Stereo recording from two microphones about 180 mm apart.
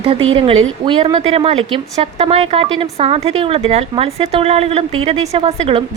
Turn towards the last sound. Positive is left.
turn(degrees=-30)  # may be behind; listen again after turning